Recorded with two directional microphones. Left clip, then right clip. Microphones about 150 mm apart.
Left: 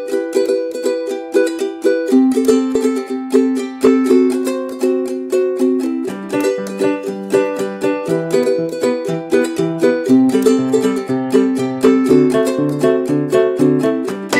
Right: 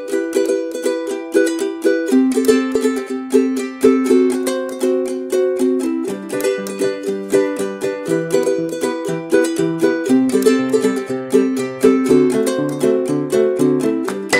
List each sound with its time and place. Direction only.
0.8 s music: 15° left (ahead or behind)
5.6 s music: 20° left (ahead or behind)
7.3 s music: 15° left (ahead or behind)